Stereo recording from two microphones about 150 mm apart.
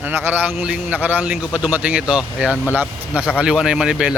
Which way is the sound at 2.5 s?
15° left (ahead or behind).